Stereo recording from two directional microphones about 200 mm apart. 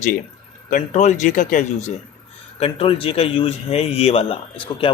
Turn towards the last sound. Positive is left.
turn(degrees=25)  # may be behind; listen again after turning